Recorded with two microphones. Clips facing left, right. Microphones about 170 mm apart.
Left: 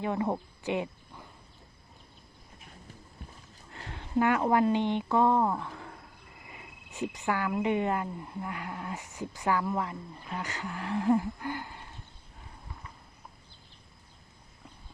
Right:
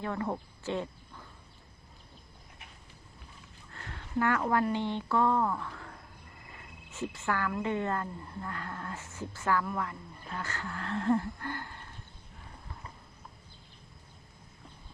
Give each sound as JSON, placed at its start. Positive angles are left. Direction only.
{"t": 0.0, "sound": "speech", "side_deg": 15}
{"t": 3.7, "sound": "speech", "side_deg": 20}